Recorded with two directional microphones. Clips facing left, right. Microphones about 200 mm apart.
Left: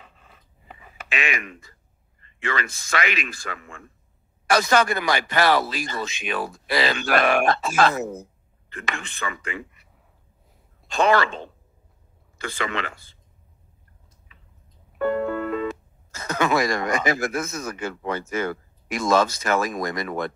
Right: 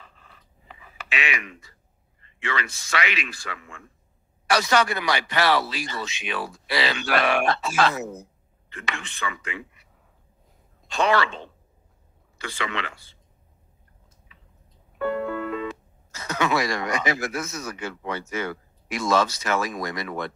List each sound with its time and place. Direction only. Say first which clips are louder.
0.7 s a sound: left 1 dB; 45° left (ahead or behind)
2.2 s speech: left 2 dB; 45° left (ahead or behind)
10.9 s speech: left 2 dB; 50° left (ahead or behind)
15.0 s speech: left 3 dB; 45° left (ahead or behind)